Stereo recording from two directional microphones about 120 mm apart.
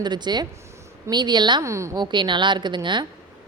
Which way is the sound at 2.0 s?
40° right (ahead or behind).